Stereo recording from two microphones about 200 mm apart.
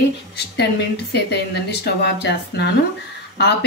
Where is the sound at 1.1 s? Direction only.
55° left (ahead or behind).